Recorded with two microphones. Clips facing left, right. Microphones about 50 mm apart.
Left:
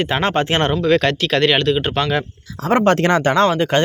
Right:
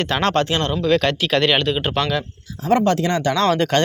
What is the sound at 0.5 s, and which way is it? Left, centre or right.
Speech, left.